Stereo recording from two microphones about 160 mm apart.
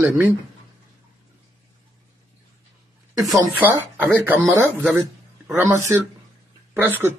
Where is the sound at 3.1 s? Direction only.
Centre (ahead or behind).